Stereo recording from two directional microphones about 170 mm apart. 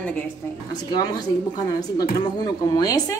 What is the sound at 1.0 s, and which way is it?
A woman's voice, 25° left (ahead or behind).